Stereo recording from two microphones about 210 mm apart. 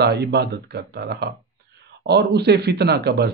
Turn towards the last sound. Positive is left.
turn(degrees=-50)  # may be behind; listen again after turning